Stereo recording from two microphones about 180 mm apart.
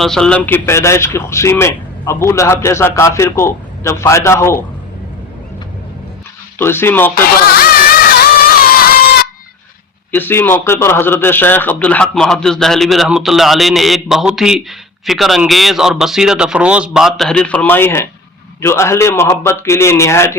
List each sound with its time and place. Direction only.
0.0 s speech: 5° left (ahead or behind)
6.6 s speech: 10° left (ahead or behind)
7.5 s music: 60° left (ahead or behind)
10.1 s a man's voice: 10° left (ahead or behind)